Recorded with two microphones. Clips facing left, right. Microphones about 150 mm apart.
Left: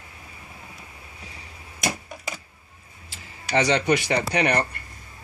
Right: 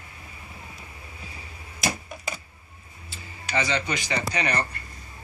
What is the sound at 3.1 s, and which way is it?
Speech, 70° left (ahead or behind).